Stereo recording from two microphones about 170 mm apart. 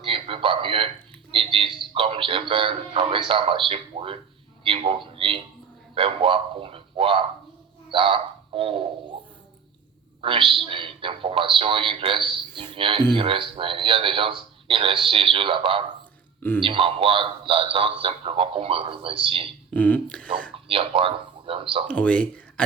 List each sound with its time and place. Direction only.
0.0 s a sound: 30° right (ahead or behind)
1.3 s speech: 30° right (ahead or behind)
7.9 s a sound: 30° right (ahead or behind)
10.2 s speech: 30° right (ahead or behind)
19.7 s speech: 10° left (ahead or behind)
20.7 s speech: 30° right (ahead or behind)
21.8 s speech: 5° left (ahead or behind)